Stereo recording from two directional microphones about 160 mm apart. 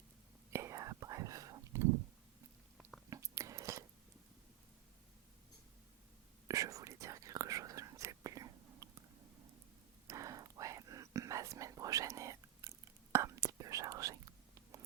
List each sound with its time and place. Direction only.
0.5 s whispering: 20° right (ahead or behind)
3.1 s chewing: 20° right (ahead or behind)
6.5 s whispering: 20° right (ahead or behind)
10.1 s whispering: 20° right (ahead or behind)